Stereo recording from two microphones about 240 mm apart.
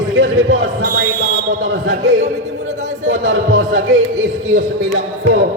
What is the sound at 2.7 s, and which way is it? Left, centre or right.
Speech, right.